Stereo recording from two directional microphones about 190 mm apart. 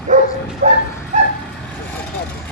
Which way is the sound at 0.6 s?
40° right (ahead or behind).